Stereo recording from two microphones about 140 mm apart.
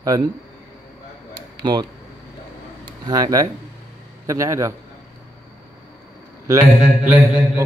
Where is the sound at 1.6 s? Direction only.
30° right (ahead or behind).